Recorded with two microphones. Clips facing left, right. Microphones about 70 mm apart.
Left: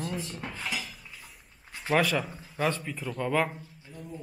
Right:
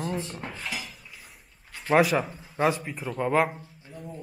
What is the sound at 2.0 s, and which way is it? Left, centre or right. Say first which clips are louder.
A man's voice: right 5 dB; centre.